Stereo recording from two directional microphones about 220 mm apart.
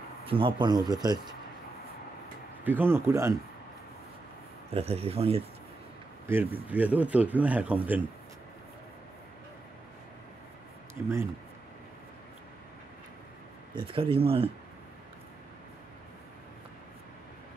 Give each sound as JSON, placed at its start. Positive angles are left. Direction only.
{"t": 0.2, "sound": "speech", "side_deg": -25}
{"t": 2.6, "sound": "speech", "side_deg": -10}
{"t": 4.7, "sound": "speech", "side_deg": -25}
{"t": 6.2, "sound": "speech", "side_deg": -10}
{"t": 11.0, "sound": "speech", "side_deg": -10}
{"t": 13.7, "sound": "speech", "side_deg": -25}